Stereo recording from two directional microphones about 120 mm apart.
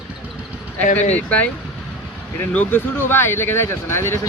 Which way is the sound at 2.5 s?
15° left (ahead or behind).